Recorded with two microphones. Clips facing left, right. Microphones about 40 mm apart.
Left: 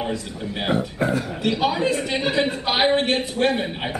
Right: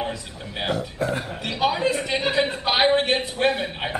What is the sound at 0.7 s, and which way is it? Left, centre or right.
Speech, left.